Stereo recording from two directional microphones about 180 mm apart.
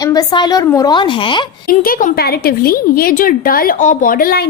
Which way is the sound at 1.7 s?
50° left (ahead or behind).